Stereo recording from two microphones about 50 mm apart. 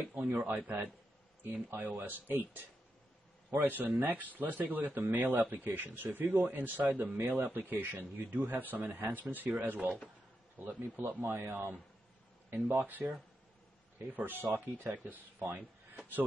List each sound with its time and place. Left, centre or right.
0.0 s speech: right
0.3 s speech: right
10.8 s speech: right